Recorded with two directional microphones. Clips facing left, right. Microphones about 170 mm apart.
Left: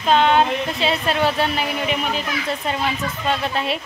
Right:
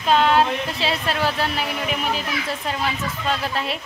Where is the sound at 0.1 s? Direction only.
Centre (ahead or behind).